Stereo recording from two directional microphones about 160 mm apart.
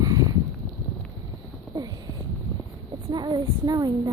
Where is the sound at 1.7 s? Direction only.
25° right (ahead or behind).